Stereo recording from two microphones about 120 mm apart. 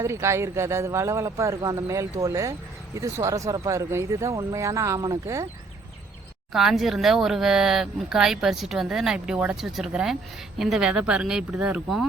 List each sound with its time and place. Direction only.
0.0 s speech: 25° right (ahead or behind)
6.5 s speech: 5° right (ahead or behind)